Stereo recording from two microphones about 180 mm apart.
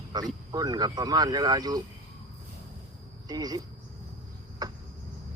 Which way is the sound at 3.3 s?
20° right (ahead or behind).